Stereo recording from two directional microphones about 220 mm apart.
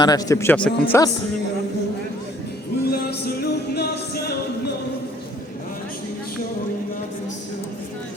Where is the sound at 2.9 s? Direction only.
45° left (ahead or behind).